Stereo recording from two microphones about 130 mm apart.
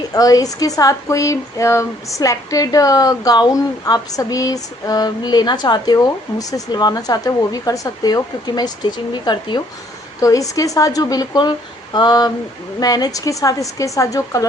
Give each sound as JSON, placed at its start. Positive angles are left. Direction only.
{"t": 0.1, "sound": "speech", "side_deg": 30}